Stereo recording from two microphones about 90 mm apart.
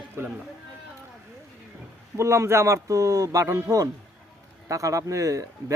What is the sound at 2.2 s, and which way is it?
Speech, 30° right (ahead or behind).